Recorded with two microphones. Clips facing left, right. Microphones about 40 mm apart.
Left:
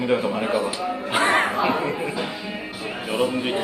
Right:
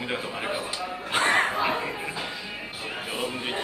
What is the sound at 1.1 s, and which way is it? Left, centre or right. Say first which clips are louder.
Speech: left 3 dB; left.